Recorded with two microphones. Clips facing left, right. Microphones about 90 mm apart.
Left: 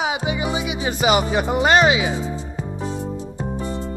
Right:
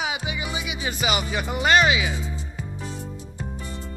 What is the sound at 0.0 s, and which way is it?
Music, 35° left (ahead or behind).